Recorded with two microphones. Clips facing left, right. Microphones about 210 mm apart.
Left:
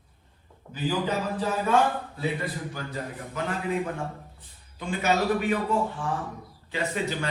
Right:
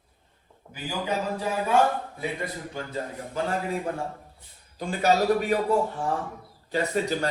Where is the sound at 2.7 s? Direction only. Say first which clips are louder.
Right 2 dB; 25° right (ahead or behind).